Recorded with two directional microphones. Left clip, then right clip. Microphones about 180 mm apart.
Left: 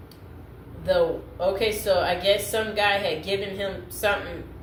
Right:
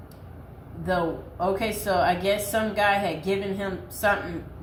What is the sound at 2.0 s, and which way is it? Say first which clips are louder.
A woman's voice: left 1 dB; 5° right (ahead or behind).